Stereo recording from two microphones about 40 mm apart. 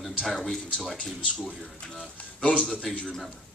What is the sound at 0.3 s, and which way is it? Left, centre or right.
Speech, centre.